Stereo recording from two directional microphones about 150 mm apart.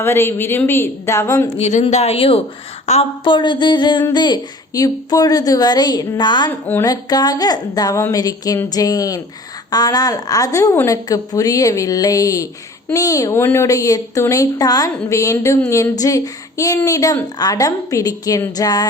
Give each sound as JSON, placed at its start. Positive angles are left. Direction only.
{"t": 0.0, "sound": "a woman's voice", "side_deg": 15}
{"t": 1.5, "sound": "a woman's voice", "side_deg": 45}
{"t": 3.2, "sound": "a woman's voice", "side_deg": 30}
{"t": 6.5, "sound": "a woman's voice", "side_deg": 10}
{"t": 6.8, "sound": "a woman's voice", "side_deg": 25}